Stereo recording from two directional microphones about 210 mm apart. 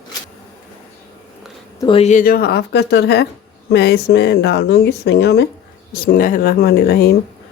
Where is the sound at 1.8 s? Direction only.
30° left (ahead or behind); by 5.5 s 55° left (ahead or behind).